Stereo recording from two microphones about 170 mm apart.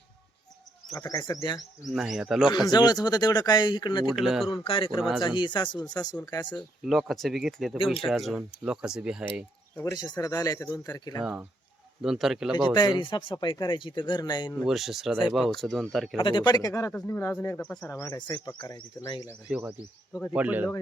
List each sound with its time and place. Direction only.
0.9 s speech: 20° left (ahead or behind)
1.9 s speech: centre (ahead or behind)
2.5 s speech: 25° left (ahead or behind)
4.1 s speech: centre (ahead or behind)
4.6 s speech: 35° left (ahead or behind)
6.8 s speech: centre (ahead or behind)
9.7 s speech: 20° left (ahead or behind)
12.0 s speech: centre (ahead or behind)
12.5 s speech: 25° left (ahead or behind)
14.6 s speech: centre (ahead or behind)
16.1 s speech: 30° left (ahead or behind)
19.5 s speech: 10° right (ahead or behind)